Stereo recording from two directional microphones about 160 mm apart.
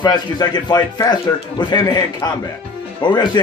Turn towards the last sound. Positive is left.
turn(degrees=25)  # may be behind; listen again after turning